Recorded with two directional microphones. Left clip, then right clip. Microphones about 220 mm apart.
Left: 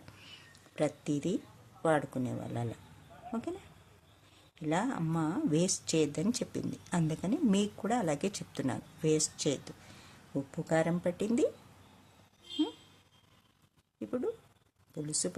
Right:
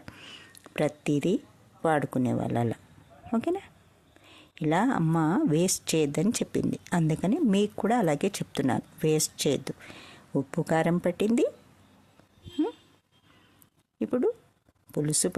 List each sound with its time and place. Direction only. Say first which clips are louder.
0.0 s cat: right 7 dB; 30° right (ahead or behind)
1.8 s speech: right 5 dB; 35° right (ahead or behind)
4.5 s speech: right 8 dB; 35° right (ahead or behind)
14.0 s a sound: right 9 dB; 40° right (ahead or behind)
14.9 s speech: right 8 dB; 40° right (ahead or behind)